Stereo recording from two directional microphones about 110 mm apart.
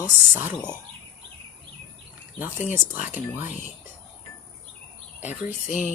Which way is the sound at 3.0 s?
15° right (ahead or behind).